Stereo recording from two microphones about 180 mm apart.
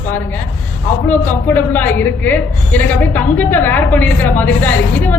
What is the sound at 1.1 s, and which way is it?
A woman's voice, 10° left (ahead or behind).